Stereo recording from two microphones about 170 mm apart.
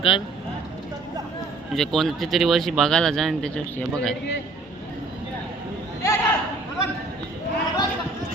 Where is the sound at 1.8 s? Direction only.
Centre (ahead or behind).